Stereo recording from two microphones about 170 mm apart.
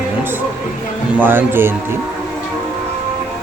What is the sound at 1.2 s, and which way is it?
Speech, 10° right (ahead or behind).